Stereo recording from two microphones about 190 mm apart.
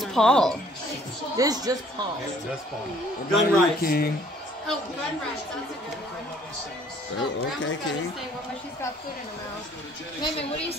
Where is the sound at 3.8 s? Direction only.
55° left (ahead or behind).